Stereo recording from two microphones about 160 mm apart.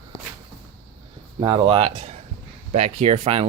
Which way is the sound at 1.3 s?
30° right (ahead or behind).